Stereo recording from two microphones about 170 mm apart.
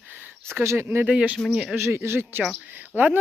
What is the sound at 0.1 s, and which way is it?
Speech, 10° right (ahead or behind).